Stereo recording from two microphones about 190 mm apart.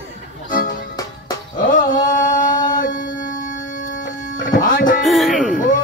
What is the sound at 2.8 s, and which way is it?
Music, 45° left (ahead or behind).